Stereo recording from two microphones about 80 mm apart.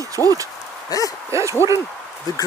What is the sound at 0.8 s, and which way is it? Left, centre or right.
Speech, left.